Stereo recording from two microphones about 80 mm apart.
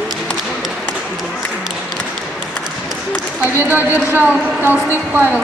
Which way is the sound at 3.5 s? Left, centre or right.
Right.